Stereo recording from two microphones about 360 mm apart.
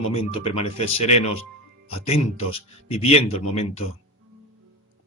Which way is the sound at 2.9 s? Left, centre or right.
Centre.